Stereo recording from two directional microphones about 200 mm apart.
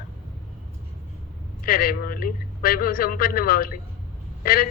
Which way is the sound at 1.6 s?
45° left (ahead or behind).